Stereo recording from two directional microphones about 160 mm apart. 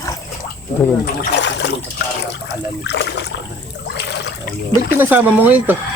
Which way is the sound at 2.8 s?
90° left.